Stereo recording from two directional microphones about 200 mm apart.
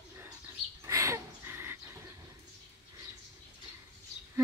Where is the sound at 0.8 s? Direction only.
15° right (ahead or behind).